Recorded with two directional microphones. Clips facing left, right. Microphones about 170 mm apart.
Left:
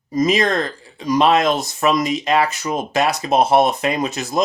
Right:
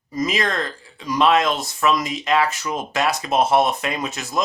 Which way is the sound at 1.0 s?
40° left (ahead or behind).